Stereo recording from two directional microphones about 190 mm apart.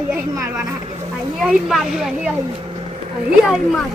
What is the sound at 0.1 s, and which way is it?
Speech, 5° right (ahead or behind).